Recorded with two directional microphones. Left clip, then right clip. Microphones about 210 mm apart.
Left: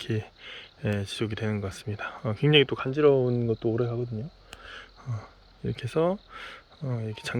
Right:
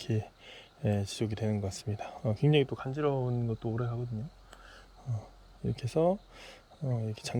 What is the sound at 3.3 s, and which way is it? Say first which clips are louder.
Speech: left 9 dB; 20° left (ahead or behind).